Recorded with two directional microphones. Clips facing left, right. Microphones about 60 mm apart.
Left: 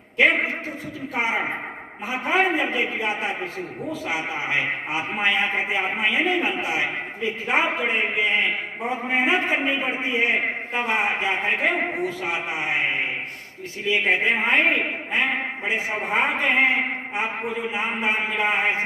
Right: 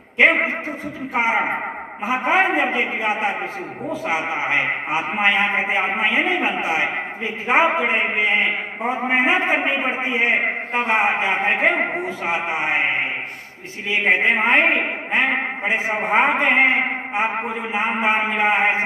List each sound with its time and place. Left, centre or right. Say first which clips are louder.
0.2 s a man's voice: right 3 dB; right
14.0 s a woman's voice: right 6 dB; right